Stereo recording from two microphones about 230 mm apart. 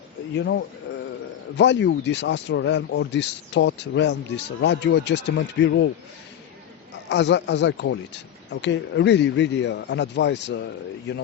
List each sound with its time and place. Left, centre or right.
0.3 s speech: left
7.1 s speech: left